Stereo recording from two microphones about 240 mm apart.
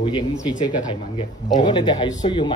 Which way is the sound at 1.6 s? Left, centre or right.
Centre.